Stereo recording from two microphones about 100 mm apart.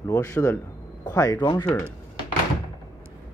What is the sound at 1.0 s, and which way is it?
Speech, 40° left (ahead or behind).